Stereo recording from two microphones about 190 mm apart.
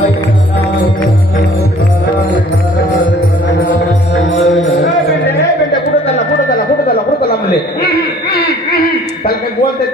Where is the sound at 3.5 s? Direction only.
65° left (ahead or behind).